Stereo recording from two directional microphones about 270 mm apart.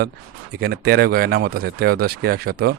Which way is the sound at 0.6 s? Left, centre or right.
Right.